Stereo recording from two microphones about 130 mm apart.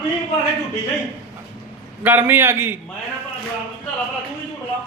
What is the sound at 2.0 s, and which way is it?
Speech, 15° right (ahead or behind).